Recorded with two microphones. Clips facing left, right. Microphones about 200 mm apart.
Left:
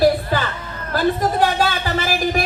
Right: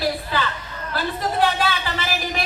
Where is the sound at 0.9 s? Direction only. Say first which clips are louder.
Left 6 dB; 45° left (ahead or behind).